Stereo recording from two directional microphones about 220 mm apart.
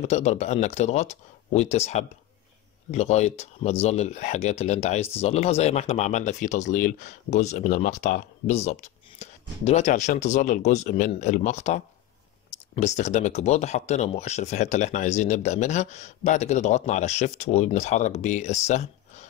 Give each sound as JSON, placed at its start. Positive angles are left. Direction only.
{"t": 0.0, "sound": "speech", "side_deg": 30}